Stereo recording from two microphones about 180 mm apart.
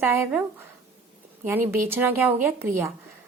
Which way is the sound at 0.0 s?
10° right (ahead or behind).